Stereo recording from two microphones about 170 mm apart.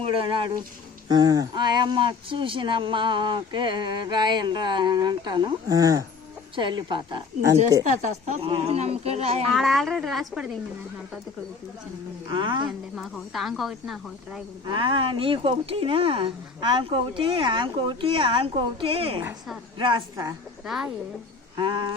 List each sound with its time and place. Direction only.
0.0 s speech: 30° right (ahead or behind)
9.5 s speech: centre (ahead or behind)
12.3 s speech: 30° right (ahead or behind)
13.0 s speech: centre (ahead or behind)
14.7 s speech: 30° right (ahead or behind)
20.7 s speech: centre (ahead or behind)
21.5 s a sound: 25° right (ahead or behind)